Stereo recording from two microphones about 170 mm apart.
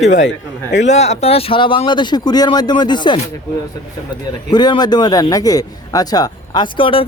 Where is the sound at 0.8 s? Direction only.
40° left (ahead or behind); by 3.2 s 25° left (ahead or behind).